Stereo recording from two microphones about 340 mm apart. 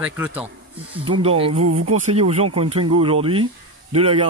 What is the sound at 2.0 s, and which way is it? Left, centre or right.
Speech, centre.